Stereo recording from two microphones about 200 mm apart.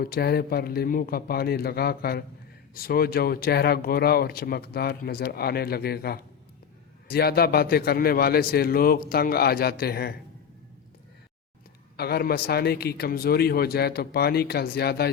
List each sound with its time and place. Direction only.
0.0 s speech: 50° left (ahead or behind)
11.9 s speech: 50° left (ahead or behind)